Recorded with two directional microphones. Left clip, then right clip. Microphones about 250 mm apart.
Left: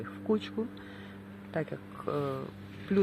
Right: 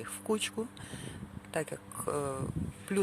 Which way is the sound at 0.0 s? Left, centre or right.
Right.